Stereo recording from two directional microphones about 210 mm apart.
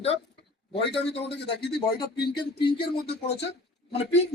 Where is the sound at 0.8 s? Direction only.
55° left (ahead or behind).